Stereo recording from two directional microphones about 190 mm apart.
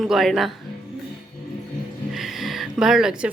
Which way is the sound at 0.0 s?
Centre (ahead or behind).